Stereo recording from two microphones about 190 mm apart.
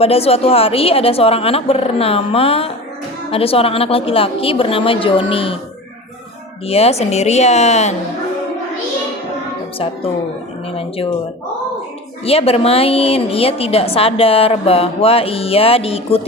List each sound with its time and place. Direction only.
0.0 s a woman's voice: 30° left (ahead or behind)
6.7 s a woman's voice: 30° left (ahead or behind)
9.7 s a woman's voice: 30° left (ahead or behind)
12.2 s a woman's voice: 30° left (ahead or behind)